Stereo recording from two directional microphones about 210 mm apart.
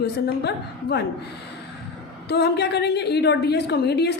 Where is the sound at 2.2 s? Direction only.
50° left (ahead or behind).